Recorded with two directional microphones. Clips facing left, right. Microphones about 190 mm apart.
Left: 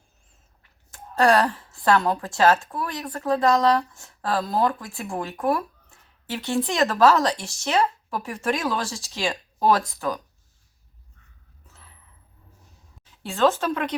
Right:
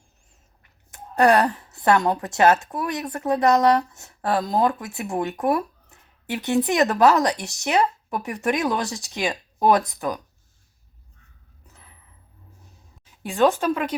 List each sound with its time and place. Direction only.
0.9 s a woman's voice: 20° right (ahead or behind)
13.2 s speech: 15° right (ahead or behind)